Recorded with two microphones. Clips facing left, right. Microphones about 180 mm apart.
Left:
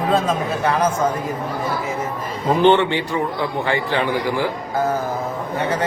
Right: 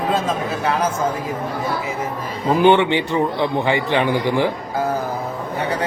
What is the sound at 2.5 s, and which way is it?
A man's voice, 10° right (ahead or behind).